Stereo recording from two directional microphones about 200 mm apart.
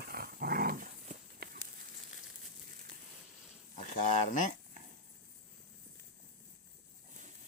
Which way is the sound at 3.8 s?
40° left (ahead or behind).